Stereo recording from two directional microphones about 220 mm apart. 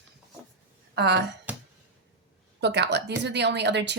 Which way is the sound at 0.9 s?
50° right (ahead or behind).